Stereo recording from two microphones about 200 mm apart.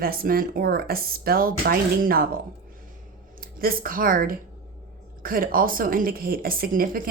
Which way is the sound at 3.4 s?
45° right (ahead or behind).